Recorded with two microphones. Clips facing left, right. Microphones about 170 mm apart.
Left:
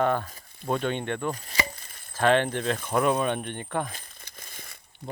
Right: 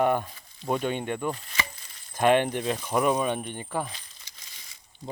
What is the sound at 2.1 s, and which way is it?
Speech, 15° right (ahead or behind).